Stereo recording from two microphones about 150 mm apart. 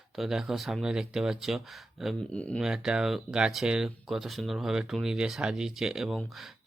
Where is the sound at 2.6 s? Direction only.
5° right (ahead or behind).